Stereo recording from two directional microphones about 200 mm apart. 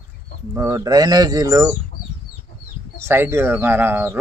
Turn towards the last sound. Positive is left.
turn(degrees=-10)  # may be behind; listen again after turning